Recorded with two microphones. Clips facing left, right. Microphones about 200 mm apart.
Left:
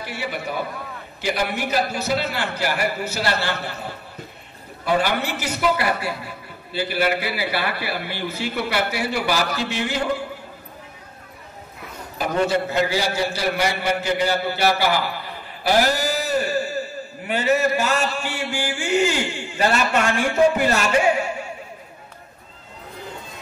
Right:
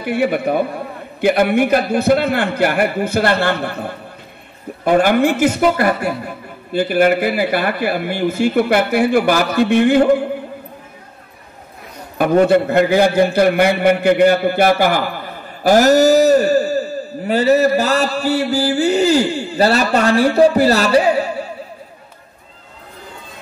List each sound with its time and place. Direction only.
0.0 s a man's voice: 55° right (ahead or behind)
12.2 s a man's voice: 55° right (ahead or behind); by 21.5 s 35° right (ahead or behind)